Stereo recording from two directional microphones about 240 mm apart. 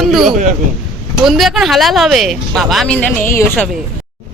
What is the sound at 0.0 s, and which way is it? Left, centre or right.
Speech, centre.